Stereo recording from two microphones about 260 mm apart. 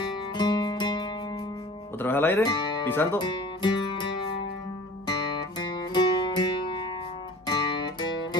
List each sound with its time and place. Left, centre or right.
0.3 s music: centre
2.0 s speech: centre
5.0 s music: centre